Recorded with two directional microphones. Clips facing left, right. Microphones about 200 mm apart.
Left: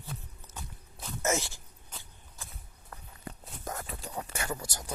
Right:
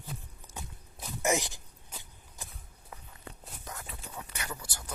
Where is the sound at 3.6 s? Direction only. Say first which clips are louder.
Left 7 dB; 45° left (ahead or behind).